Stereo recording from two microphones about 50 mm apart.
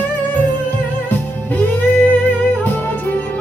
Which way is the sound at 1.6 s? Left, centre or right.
Left.